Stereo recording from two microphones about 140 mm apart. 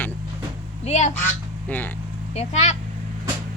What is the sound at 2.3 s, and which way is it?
Speech, 50° left (ahead or behind).